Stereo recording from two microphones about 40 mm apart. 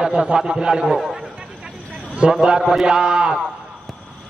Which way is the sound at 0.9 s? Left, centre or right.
Centre.